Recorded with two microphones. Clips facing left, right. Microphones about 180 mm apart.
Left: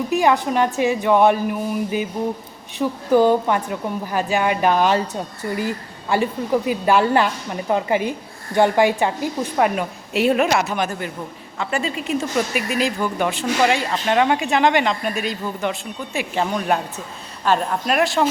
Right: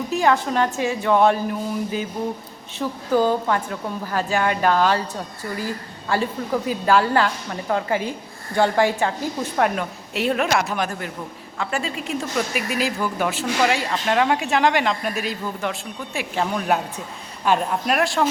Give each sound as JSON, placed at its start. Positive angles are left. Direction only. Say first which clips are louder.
{"t": 0.1, "sound": "a woman's voice", "louder": "left 1 dB", "side_deg": 15}
{"t": 2.7, "sound": "a woman's voice", "louder": "left 4 dB", "side_deg": 15}